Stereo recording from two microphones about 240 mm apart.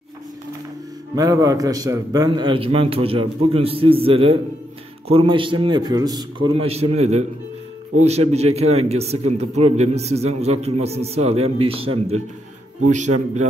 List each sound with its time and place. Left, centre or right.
1.1 s a man's voice: centre; by 13.1 s right